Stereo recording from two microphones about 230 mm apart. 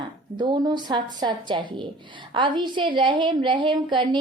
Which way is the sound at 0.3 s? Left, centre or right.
Centre.